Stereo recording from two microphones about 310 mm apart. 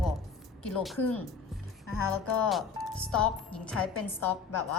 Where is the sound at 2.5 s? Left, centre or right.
Centre.